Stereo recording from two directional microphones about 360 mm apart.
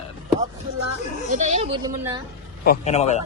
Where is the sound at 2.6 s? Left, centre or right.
Left.